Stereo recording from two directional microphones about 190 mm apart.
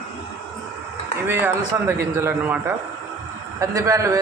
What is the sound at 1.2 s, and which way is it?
A man's voice, 10° right (ahead or behind).